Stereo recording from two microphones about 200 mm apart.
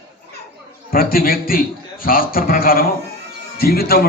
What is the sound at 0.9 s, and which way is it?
A man's voice, 45° left (ahead or behind).